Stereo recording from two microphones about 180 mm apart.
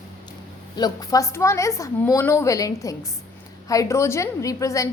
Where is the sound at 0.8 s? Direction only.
20° left (ahead or behind).